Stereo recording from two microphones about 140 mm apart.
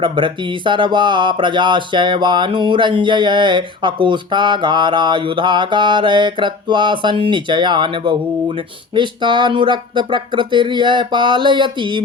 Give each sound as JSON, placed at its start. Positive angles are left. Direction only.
{"t": 0.0, "sound": "speech", "side_deg": -35}